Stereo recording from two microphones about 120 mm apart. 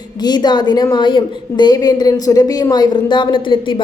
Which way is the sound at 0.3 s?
35° left (ahead or behind).